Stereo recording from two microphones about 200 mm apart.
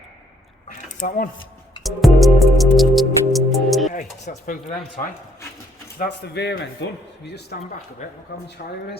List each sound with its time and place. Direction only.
0.7 s a sound: 45° left (ahead or behind)
1.8 s music: centre (ahead or behind)
3.9 s speech: 40° left (ahead or behind)
6.0 s speech: 55° left (ahead or behind)
7.5 s speech: 45° left (ahead or behind)